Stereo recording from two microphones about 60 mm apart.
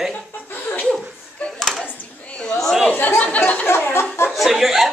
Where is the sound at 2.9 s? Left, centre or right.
Left.